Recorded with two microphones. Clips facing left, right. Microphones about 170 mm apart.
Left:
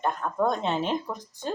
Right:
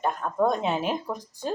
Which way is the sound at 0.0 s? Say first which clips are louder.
Right 1 dB; 5° right (ahead or behind).